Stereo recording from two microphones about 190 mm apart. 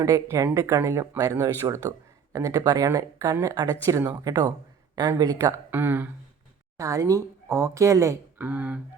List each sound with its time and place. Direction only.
0.0 s speech: 15° right (ahead or behind)